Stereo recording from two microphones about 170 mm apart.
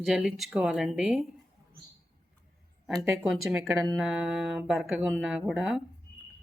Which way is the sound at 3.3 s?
Centre (ahead or behind).